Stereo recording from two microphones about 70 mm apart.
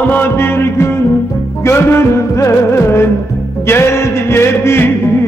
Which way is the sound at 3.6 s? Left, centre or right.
Left.